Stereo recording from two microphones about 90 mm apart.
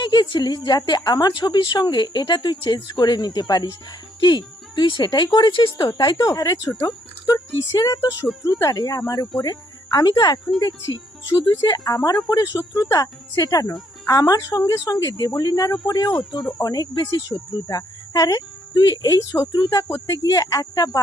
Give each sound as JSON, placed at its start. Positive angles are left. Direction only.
{"t": 0.0, "sound": "a woman's voice", "side_deg": 55}
{"t": 1.3, "sound": "speech", "side_deg": 60}
{"t": 6.0, "sound": "a woman's voice", "side_deg": 55}
{"t": 10.9, "sound": "a woman's voice", "side_deg": 55}